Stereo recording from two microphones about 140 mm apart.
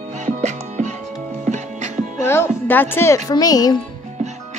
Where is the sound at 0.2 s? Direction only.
55° right (ahead or behind).